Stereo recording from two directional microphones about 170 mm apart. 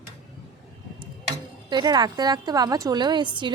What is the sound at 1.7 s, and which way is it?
A woman's voice, 25° right (ahead or behind).